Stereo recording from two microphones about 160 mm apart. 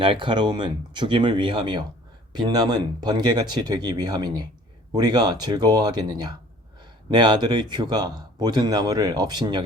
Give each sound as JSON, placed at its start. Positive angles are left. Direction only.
{"t": 0.0, "sound": "speech", "side_deg": -30}